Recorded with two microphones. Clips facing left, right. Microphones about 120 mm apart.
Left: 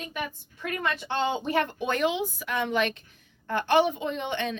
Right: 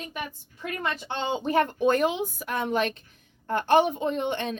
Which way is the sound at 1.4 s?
40° right (ahead or behind).